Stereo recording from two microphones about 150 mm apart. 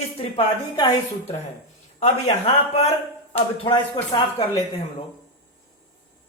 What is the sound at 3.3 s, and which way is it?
Speech, 35° left (ahead or behind).